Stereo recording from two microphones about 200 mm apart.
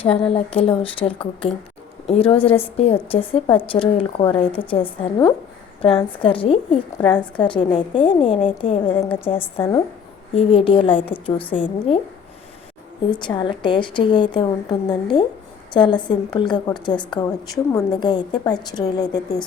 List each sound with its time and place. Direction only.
0.0 s a woman's voice: 30° left (ahead or behind)
13.1 s a woman's voice: 25° left (ahead or behind)